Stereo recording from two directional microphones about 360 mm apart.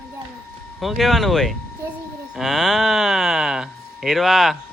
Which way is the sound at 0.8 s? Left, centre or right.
Centre.